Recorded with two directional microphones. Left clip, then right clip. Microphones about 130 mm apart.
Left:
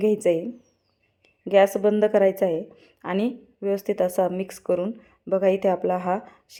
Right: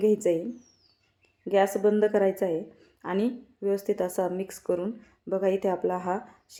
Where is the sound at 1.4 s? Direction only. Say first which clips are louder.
Left 5 dB; 20° left (ahead or behind).